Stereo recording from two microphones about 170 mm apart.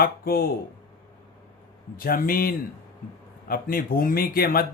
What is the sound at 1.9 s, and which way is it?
Speech, 55° left (ahead or behind).